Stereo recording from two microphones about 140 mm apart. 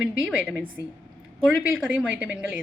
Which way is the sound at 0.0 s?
5° right (ahead or behind).